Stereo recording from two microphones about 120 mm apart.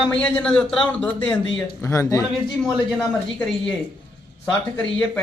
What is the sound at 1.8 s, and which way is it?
Speech, 25° left (ahead or behind).